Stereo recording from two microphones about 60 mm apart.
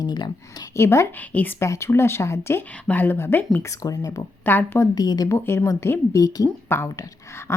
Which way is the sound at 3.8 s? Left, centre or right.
Left.